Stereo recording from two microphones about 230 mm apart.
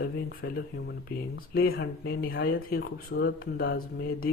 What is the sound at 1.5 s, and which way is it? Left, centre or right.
Speech, left.